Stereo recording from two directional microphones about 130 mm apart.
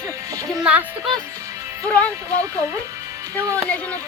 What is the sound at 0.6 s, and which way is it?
Speech, 10° right (ahead or behind).